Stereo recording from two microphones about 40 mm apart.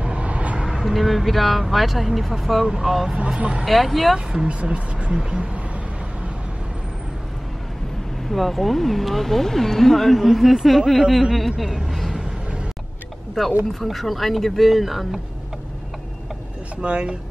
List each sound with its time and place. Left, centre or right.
0.0 s vehicle: right
0.6 s vehicle: centre
0.8 s speech: centre
3.3 s speech: right
3.6 s speech: centre
4.5 s speech: right
5.1 s speech: centre
8.3 s speech: centre
13.4 s speech: centre
16.8 s speech: right